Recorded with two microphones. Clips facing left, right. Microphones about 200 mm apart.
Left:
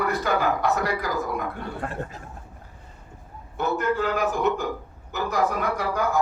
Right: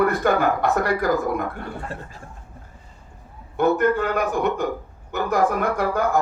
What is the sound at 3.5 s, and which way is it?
Speech, 55° right (ahead or behind).